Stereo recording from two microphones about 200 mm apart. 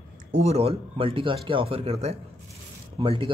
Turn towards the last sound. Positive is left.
turn(degrees=-25)  # may be behind; listen again after turning